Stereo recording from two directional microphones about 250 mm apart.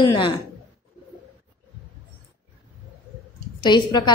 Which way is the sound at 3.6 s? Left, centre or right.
Centre.